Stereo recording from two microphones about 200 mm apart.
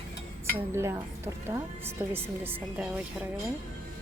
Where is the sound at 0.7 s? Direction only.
15° right (ahead or behind).